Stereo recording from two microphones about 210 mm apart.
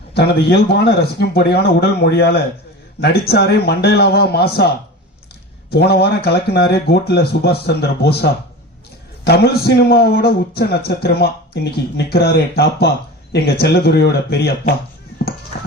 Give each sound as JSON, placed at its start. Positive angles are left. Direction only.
{"t": 0.1, "sound": "a man's voice", "side_deg": 50}
{"t": 5.7, "sound": "a man's voice", "side_deg": 50}